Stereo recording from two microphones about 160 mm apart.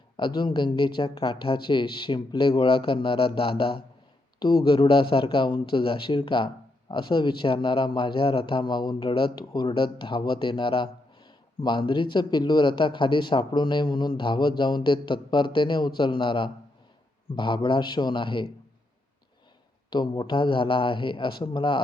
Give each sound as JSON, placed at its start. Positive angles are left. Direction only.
{"t": 0.2, "sound": "a man's voice", "side_deg": 30}
{"t": 19.9, "sound": "speech", "side_deg": 30}